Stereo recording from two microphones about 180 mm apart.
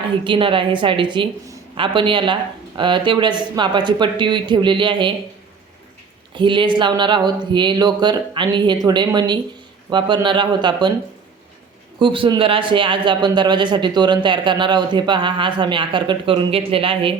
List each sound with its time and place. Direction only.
0.3 s speech: 30° right (ahead or behind)
6.3 s speech: 25° right (ahead or behind)
11.9 s speech: 30° right (ahead or behind)